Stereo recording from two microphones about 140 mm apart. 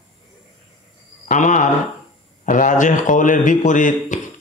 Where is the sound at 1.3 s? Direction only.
60° left (ahead or behind).